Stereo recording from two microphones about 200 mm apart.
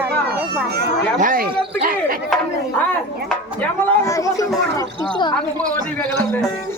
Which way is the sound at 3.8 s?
15° left (ahead or behind).